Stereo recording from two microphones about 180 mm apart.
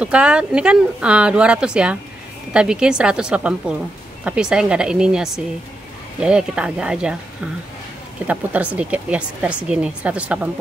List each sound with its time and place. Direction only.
0.0 s speech: 5° right (ahead or behind)
8.7 s a woman's voice: 5° right (ahead or behind)